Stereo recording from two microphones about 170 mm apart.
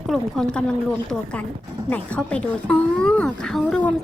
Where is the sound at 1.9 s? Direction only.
5° left (ahead or behind).